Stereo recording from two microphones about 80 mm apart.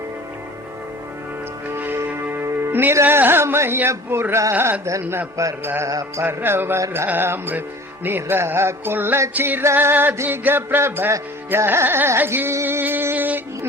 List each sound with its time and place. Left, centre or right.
1.7 s music: right
4.5 s speech: right
5.6 s music: right
5.9 s music: right
6.2 s speech: right
10.2 s music: right